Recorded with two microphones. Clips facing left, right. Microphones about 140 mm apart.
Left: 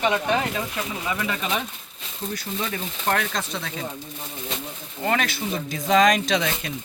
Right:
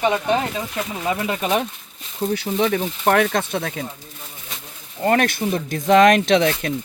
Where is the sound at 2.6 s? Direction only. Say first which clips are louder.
Right 9 dB; 65° right (ahead or behind).